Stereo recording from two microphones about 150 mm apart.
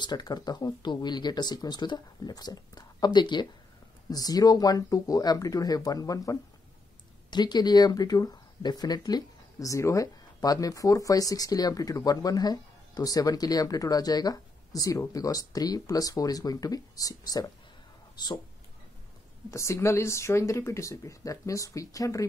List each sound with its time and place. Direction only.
0.0 s speech: 30° left (ahead or behind)
19.5 s speech: 20° left (ahead or behind)